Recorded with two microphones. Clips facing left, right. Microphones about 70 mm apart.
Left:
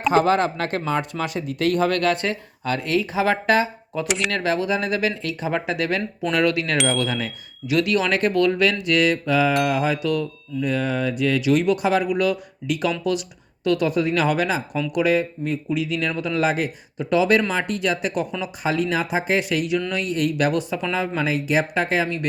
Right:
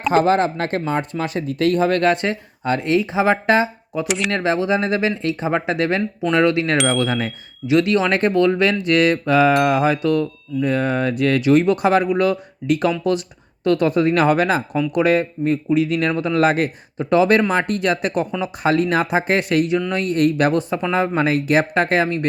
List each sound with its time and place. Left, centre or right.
0.1 s speech: right
4.0 s speech: centre
4.3 s speech: right
21.2 s speech: right